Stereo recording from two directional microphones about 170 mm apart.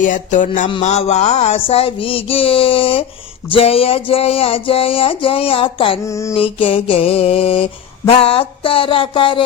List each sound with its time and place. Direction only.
0.0 s music: 50° left (ahead or behind)
0.8 s mantra: 40° left (ahead or behind)
6.1 s a sound: 15° left (ahead or behind)
6.3 s mantra: 30° left (ahead or behind)